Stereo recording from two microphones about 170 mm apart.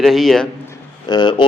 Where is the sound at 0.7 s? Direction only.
25° left (ahead or behind).